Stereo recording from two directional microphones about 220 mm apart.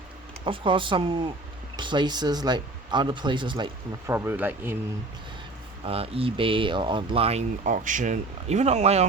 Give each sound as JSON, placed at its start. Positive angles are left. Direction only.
{"t": 0.4, "sound": "speech", "side_deg": -25}
{"t": 5.8, "sound": "speech", "side_deg": -25}